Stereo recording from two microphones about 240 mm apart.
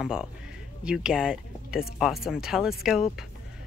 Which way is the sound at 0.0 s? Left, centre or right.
Centre.